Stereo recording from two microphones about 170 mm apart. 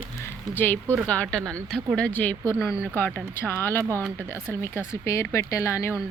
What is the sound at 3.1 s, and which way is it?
A woman's voice, 10° left (ahead or behind).